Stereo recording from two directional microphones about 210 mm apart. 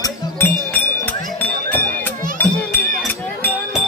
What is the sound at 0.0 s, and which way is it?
Music, 10° left (ahead or behind).